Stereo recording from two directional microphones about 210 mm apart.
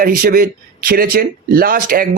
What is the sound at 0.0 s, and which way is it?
Speech, 45° right (ahead or behind).